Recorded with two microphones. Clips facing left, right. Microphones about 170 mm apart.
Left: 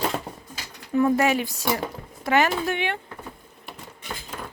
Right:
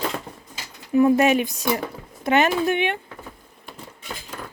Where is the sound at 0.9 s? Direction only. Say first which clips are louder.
Right 4 dB; 15° right (ahead or behind).